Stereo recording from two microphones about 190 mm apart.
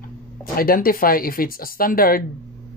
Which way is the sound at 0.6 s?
50° left (ahead or behind).